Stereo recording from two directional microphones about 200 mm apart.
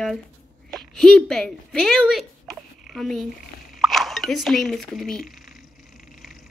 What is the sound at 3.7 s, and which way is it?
Speech, centre (ahead or behind).